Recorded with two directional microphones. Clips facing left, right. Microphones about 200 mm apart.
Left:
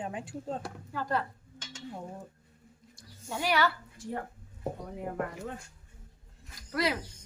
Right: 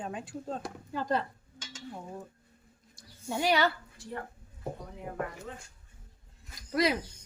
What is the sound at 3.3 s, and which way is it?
Speech, 20° right (ahead or behind).